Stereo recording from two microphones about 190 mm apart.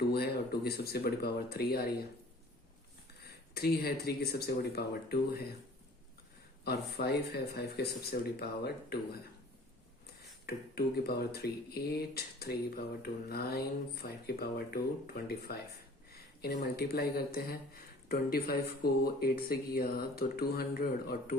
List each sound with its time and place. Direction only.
0.1 s speech: 55° left (ahead or behind)
3.2 s speech: 55° left (ahead or behind)
6.7 s speech: 55° left (ahead or behind)
10.4 s speech: 55° left (ahead or behind)